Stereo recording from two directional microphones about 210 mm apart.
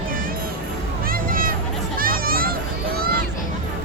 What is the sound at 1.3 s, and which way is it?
Music, 40° right (ahead or behind).